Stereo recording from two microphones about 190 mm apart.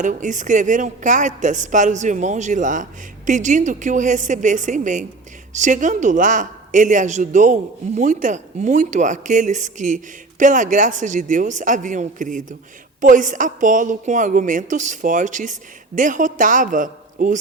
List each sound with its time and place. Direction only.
0.0 s a woman's voice: 40° right (ahead or behind)